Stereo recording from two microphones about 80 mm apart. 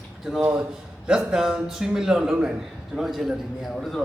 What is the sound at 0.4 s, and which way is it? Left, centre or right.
Speech, right.